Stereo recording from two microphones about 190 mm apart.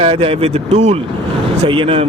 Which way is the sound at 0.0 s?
30° right (ahead or behind).